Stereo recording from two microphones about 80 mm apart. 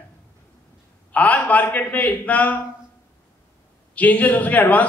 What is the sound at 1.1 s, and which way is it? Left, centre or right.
A man's voice, centre.